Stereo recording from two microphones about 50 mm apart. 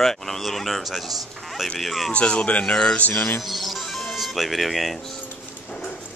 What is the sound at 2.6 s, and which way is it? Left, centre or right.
Music, centre.